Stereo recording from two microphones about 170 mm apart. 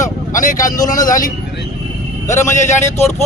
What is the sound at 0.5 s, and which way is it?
Speech, 20° left (ahead or behind).